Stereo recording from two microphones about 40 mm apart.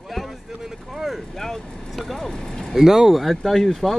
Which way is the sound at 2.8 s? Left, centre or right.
Centre.